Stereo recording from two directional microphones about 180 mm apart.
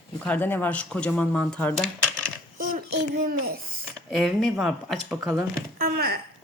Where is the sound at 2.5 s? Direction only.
50° right (ahead or behind).